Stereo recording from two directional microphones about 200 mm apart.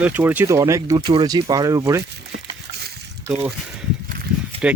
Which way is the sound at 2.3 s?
55° right (ahead or behind).